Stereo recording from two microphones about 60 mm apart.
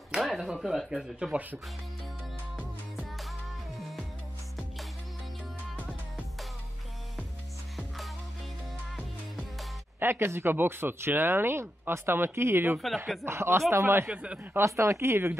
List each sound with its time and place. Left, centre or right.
0.1 s speech: centre
3.0 s music: centre
9.9 s speech: right
14.0 s speech: right
14.6 s speech: right